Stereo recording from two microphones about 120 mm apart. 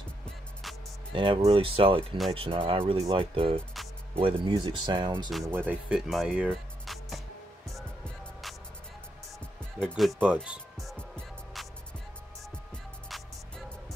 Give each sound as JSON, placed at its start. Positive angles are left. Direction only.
{"t": 1.1, "sound": "speech", "side_deg": -45}
{"t": 5.5, "sound": "speech", "side_deg": -15}
{"t": 5.9, "sound": "speech", "side_deg": -5}
{"t": 6.5, "sound": "music", "side_deg": 0}
{"t": 9.8, "sound": "speech", "side_deg": 0}
{"t": 10.2, "sound": "music", "side_deg": -10}